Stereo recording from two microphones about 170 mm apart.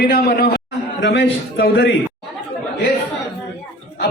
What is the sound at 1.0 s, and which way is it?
Speech, 90° left.